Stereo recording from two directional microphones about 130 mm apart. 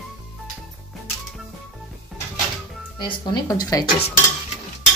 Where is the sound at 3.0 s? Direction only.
30° left (ahead or behind).